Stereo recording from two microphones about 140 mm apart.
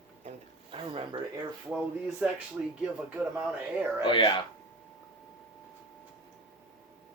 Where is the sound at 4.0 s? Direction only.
35° left (ahead or behind).